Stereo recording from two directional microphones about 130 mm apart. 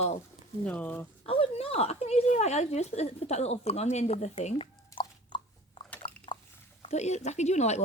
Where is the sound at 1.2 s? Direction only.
45° left (ahead or behind).